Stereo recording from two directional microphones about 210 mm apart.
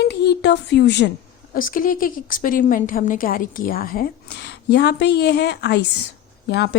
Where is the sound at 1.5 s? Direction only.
40° left (ahead or behind).